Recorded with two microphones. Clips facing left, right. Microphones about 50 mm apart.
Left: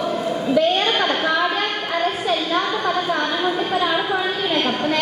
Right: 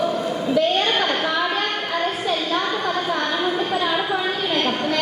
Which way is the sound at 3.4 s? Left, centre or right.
Centre.